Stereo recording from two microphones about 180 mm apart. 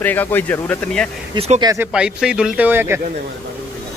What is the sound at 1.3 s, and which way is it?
Speech, 30° right (ahead or behind).